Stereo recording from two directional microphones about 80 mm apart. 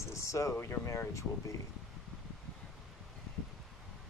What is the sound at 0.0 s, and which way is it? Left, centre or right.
Speech, left.